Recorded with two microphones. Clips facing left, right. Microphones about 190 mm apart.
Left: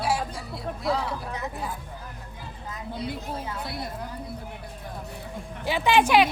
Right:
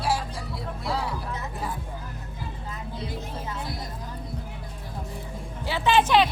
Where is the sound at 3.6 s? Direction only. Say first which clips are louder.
Left 2 dB; 65° left (ahead or behind).